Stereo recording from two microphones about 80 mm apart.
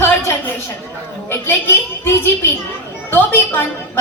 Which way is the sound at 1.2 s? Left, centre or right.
Left.